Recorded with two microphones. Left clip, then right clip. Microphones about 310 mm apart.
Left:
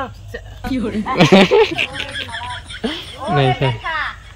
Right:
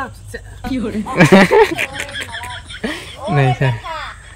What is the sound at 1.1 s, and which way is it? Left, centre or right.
Speech, centre.